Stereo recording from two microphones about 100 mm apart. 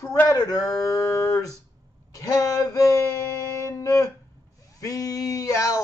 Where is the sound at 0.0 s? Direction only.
30° left (ahead or behind).